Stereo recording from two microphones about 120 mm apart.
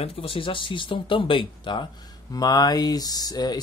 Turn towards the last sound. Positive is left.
turn(degrees=35)  # may be behind; listen again after turning